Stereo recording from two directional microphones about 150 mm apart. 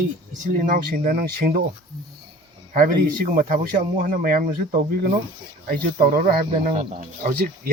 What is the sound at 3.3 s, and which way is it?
Speech, 65° right (ahead or behind).